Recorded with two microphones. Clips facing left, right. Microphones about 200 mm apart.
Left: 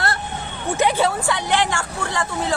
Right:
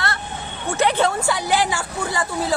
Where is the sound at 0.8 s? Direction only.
5° left (ahead or behind).